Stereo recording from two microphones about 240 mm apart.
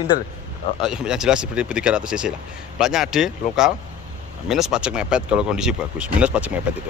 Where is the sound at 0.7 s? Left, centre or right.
Centre.